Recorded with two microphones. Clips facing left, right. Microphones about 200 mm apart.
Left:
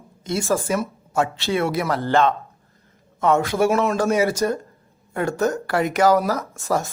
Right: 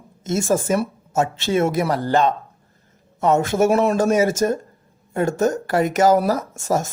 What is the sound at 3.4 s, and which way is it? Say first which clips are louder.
Speech: right 2 dB; 50° right (ahead or behind).